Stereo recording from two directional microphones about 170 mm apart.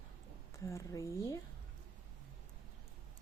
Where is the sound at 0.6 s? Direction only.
15° left (ahead or behind).